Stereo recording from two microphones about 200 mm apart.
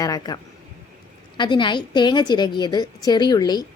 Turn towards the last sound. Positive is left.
turn(degrees=20)  # may be behind; listen again after turning